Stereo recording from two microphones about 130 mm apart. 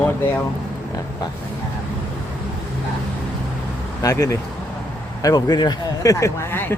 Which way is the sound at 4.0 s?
25° left (ahead or behind).